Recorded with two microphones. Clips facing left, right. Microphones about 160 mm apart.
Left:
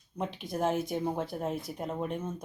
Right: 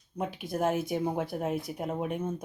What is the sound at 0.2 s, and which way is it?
Speech, 5° right (ahead or behind).